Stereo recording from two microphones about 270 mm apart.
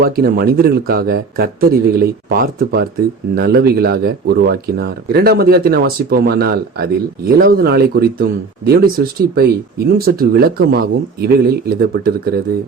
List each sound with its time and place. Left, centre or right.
0.0 s a man's voice: right